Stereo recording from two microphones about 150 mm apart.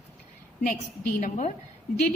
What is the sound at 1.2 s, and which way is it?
Speech, 55° left (ahead or behind).